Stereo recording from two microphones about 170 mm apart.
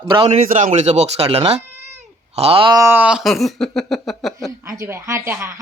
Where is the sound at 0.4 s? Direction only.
50° right (ahead or behind).